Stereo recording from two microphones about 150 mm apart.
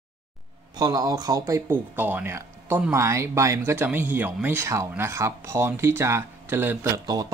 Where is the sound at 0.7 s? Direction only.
25° right (ahead or behind).